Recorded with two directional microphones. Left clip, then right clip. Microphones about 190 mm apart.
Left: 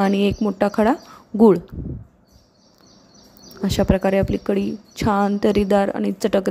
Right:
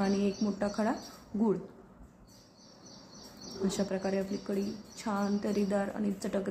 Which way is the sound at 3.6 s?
55° left (ahead or behind).